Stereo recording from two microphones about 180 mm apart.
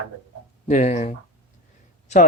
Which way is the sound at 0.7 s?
40° left (ahead or behind).